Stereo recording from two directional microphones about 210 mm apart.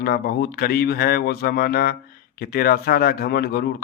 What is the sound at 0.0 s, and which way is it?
Speech, 45° left (ahead or behind).